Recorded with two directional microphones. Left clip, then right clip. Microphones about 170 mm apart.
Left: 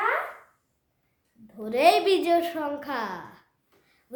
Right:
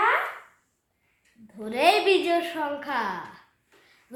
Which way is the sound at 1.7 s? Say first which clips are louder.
Left 1 dB; 55° left (ahead or behind).